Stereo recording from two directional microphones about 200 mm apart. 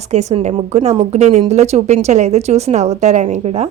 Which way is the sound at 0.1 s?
35° right (ahead or behind).